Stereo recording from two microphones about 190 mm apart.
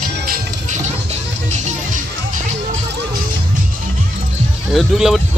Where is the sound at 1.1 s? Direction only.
40° right (ahead or behind).